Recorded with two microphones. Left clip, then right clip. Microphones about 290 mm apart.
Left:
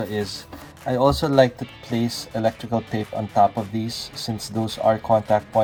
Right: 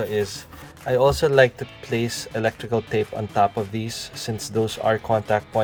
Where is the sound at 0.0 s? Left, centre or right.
Right.